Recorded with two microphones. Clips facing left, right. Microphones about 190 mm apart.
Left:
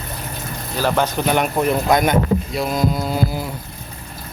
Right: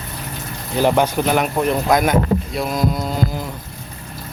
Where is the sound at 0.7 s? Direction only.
15° right (ahead or behind).